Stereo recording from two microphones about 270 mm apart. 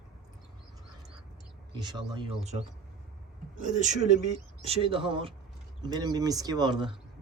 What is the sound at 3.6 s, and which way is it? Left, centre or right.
Speech, right.